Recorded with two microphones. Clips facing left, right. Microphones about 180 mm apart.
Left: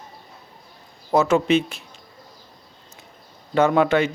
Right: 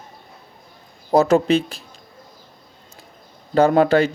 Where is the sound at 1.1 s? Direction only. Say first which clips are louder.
Right 3 dB; 35° right (ahead or behind).